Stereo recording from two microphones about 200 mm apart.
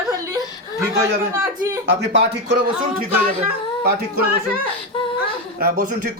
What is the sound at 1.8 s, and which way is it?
Speech, 60° right (ahead or behind).